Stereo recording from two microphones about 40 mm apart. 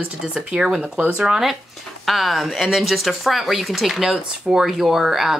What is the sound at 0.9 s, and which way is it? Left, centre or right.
Speech, right.